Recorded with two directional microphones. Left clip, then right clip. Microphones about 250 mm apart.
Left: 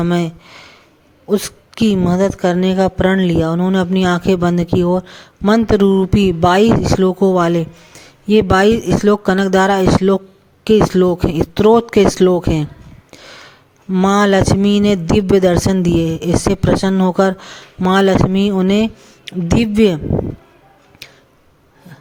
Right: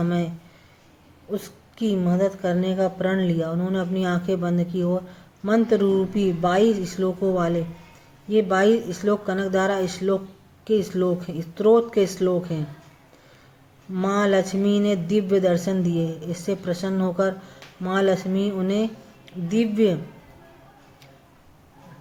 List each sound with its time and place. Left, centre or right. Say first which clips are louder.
0.0 s a woman's voice: left 9 dB; left
13.2 s a sound: left 16 dB; left
13.9 s a woman's voice: left 8 dB; left
21.0 s tick-tock: left 18 dB; left